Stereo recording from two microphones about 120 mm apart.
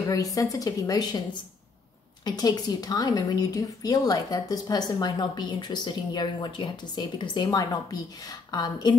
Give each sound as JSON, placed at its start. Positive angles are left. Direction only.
{"t": 0.1, "sound": "a woman's voice", "side_deg": 30}
{"t": 2.2, "sound": "a woman's voice", "side_deg": 35}